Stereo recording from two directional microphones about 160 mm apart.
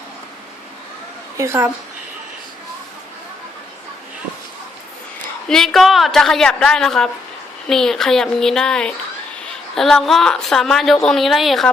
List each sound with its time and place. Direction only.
1.4 s a woman's voice: 15° right (ahead or behind)
5.5 s a woman's voice: centre (ahead or behind)